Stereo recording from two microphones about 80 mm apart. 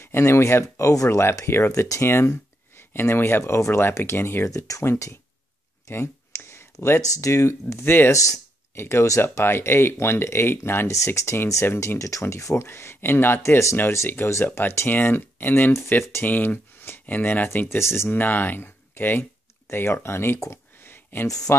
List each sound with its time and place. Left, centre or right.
0.0 s speech: left
7.7 s speech: left
8.1 s speech: left
15.7 s speech: left
20.8 s a sound: left
21.3 s speech: left